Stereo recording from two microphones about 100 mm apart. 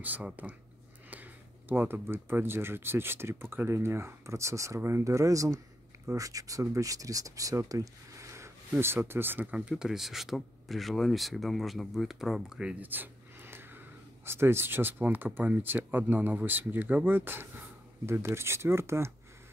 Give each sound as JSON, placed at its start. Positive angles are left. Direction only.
{"t": 0.0, "sound": "speech", "side_deg": -15}